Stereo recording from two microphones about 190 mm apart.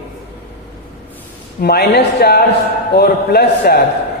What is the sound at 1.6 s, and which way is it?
A man's voice, 55° left (ahead or behind).